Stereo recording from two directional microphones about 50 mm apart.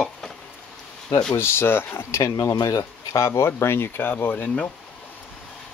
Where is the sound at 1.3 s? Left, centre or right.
Left.